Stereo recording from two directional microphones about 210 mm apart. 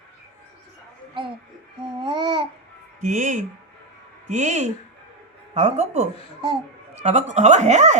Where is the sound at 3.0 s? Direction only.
35° right (ahead or behind).